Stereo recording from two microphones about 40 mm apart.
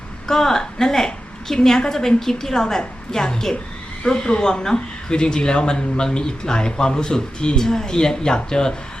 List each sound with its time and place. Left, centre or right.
0.3 s a woman's voice: centre